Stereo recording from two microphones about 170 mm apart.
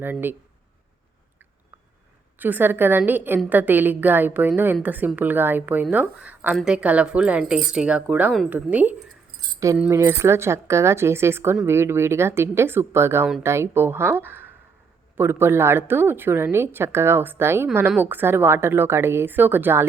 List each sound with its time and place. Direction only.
0.0 s a woman's voice: 10° right (ahead or behind)
2.4 s a woman's voice: 10° right (ahead or behind)